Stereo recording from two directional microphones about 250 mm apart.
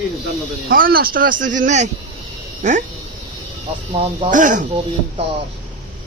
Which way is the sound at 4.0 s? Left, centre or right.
Right.